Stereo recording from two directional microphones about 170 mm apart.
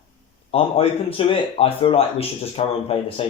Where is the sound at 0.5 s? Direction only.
35° left (ahead or behind).